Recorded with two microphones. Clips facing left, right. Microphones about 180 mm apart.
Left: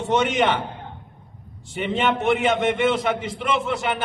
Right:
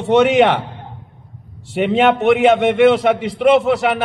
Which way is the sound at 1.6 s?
65° right (ahead or behind).